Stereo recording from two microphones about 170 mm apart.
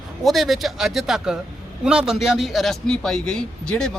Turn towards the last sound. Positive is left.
turn(degrees=5)  # may be behind; listen again after turning